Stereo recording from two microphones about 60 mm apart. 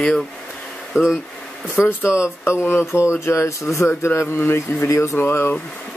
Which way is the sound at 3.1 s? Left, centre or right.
Left.